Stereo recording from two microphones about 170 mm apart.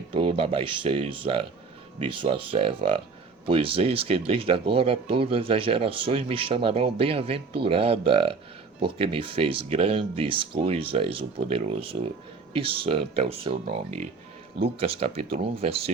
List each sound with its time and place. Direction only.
0.1 s speech: 30° right (ahead or behind)